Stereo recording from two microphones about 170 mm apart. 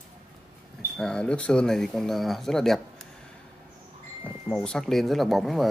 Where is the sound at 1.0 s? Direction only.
5° left (ahead or behind).